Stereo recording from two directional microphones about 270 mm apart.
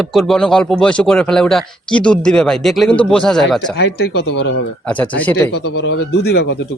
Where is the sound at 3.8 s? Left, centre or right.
Left.